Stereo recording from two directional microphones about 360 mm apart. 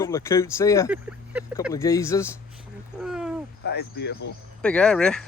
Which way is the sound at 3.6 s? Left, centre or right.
Left.